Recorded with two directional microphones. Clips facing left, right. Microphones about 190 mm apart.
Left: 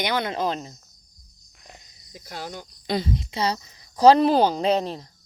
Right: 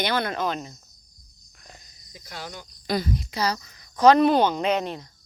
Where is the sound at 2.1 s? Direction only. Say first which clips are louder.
Left 3 dB; 45° left (ahead or behind).